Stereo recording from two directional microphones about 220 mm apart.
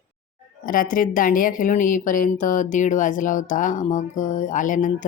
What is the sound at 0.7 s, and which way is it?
A woman's voice, 40° left (ahead or behind).